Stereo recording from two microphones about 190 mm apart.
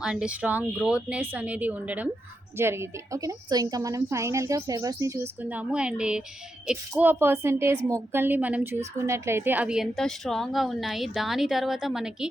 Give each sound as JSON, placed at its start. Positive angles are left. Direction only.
{"t": 0.0, "sound": "a woman's voice", "side_deg": -5}